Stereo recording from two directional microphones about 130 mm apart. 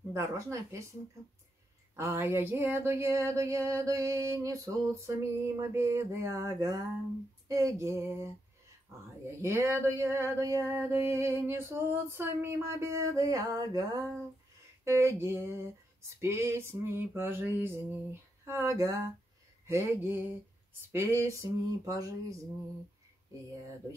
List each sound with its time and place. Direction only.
0.1 s music: 25° right (ahead or behind)
2.0 s music: 20° right (ahead or behind)
9.4 s music: 20° right (ahead or behind)
19.6 s speech: 20° right (ahead or behind)
20.9 s music: 20° right (ahead or behind)